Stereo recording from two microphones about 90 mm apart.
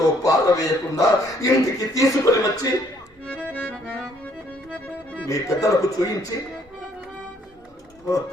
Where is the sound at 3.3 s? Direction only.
15° left (ahead or behind).